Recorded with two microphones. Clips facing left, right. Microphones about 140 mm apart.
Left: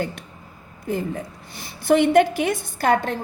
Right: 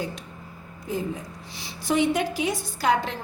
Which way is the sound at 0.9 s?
60° left (ahead or behind).